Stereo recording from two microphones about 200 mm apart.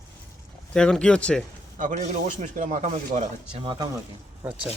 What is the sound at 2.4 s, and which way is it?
Speech, 40° right (ahead or behind).